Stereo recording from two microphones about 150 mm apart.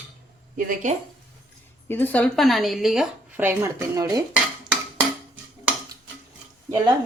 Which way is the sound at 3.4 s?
15° right (ahead or behind).